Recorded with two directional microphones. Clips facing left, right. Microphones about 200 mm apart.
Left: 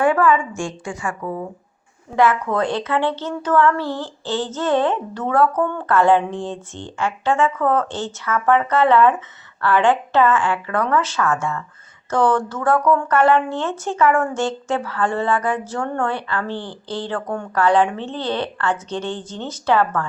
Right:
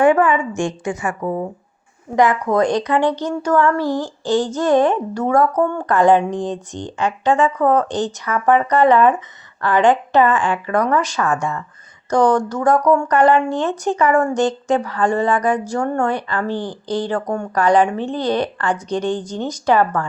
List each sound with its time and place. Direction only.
0.0 s a woman's voice: 20° right (ahead or behind)
1.2 s speech: 30° right (ahead or behind)
2.1 s speech: 15° right (ahead or behind)